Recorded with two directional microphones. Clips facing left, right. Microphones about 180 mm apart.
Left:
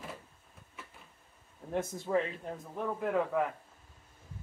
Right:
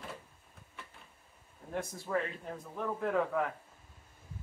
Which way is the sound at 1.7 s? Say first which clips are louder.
Left 4 dB; 20° left (ahead or behind).